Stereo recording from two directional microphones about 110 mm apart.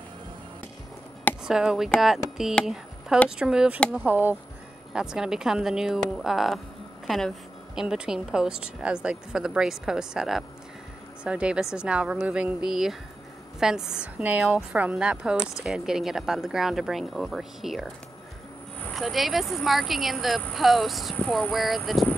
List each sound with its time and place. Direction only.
1.4 s a woman's voice: 5° right (ahead or behind)
4.9 s speech: 5° right (ahead or behind)
7.7 s a woman's voice: 5° right (ahead or behind)
18.9 s speech: centre (ahead or behind)
21.2 s speech: 10° left (ahead or behind)
21.5 s speech: centre (ahead or behind)